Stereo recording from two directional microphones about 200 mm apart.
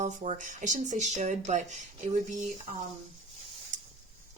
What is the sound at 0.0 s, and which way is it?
A woman's voice, 40° right (ahead or behind).